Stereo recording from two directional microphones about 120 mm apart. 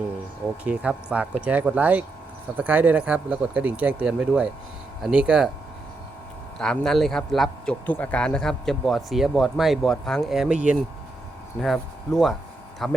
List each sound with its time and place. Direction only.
0.6 s speech: 10° right (ahead or behind)
6.6 s a man's voice: 5° left (ahead or behind)